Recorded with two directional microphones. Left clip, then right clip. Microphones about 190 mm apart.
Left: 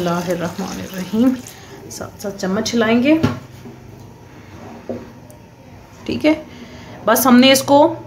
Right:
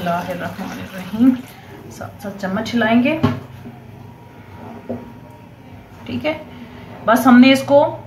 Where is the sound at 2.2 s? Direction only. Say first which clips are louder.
Left 3 dB; 55° left (ahead or behind).